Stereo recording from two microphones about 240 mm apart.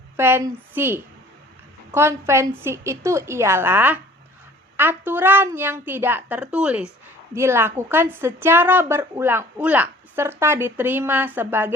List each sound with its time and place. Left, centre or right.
0.2 s a woman's voice: centre